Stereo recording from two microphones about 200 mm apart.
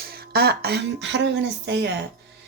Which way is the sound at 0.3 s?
55° right (ahead or behind).